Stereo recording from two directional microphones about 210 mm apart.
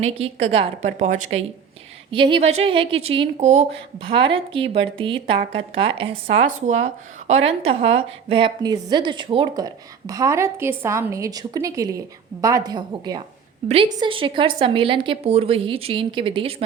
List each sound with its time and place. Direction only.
0.0 s a woman's voice: 30° right (ahead or behind)
2.0 s a woman's voice: 25° right (ahead or behind)